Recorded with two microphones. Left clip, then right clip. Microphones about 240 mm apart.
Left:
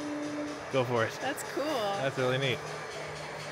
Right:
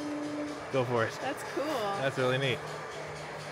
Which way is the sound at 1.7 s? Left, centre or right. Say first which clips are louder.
Left 2 dB; left.